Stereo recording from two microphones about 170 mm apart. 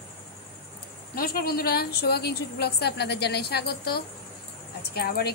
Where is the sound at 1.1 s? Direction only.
60° left (ahead or behind).